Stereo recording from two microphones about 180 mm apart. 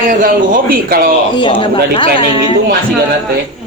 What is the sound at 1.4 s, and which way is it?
A woman's voice, 25° left (ahead or behind).